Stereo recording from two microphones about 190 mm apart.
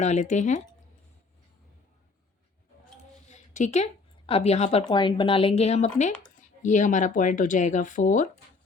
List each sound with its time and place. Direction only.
0.0 s speech: 40° left (ahead or behind)
3.2 s a sound: 40° left (ahead or behind)
4.3 s speech: 30° left (ahead or behind)